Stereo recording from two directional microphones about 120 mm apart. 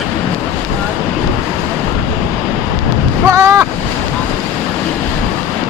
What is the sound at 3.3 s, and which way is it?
Waves, 25° right (ahead or behind).